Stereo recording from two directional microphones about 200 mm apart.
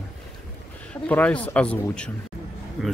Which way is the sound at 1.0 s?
5° left (ahead or behind).